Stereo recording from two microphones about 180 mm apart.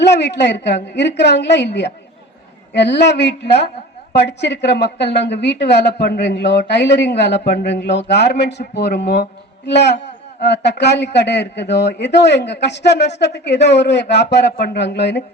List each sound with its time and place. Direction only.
0.0 s a man's voice: 70° left (ahead or behind)